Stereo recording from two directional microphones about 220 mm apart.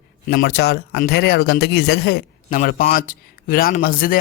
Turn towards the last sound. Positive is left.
turn(degrees=40)  # may be behind; listen again after turning